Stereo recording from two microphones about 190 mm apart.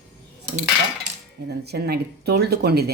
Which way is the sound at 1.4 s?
60° right (ahead or behind).